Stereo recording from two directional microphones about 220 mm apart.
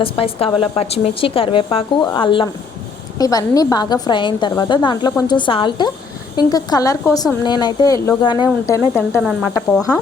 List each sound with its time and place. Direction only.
0.0 s a woman's voice: 25° left (ahead or behind)
8.7 s a woman's voice: 10° left (ahead or behind)
9.1 s speech: 5° right (ahead or behind)